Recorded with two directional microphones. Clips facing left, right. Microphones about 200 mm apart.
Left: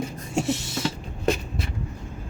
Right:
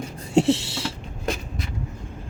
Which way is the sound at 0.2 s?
30° right (ahead or behind).